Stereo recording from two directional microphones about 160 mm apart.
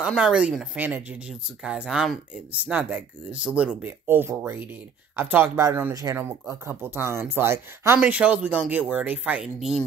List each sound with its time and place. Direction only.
0.1 s speech: 5° right (ahead or behind)